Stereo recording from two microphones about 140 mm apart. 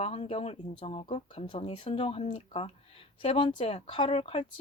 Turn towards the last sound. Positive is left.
turn(degrees=45)  # may be behind; listen again after turning